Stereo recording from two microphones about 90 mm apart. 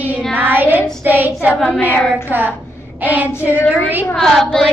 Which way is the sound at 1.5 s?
5° left (ahead or behind).